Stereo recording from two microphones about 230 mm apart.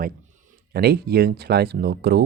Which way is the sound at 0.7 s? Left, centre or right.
Right.